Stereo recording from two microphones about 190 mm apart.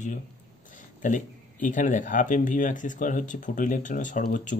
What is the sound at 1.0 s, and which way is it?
Speech, 40° left (ahead or behind).